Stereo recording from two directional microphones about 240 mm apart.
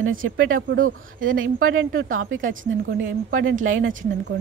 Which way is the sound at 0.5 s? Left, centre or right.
Right.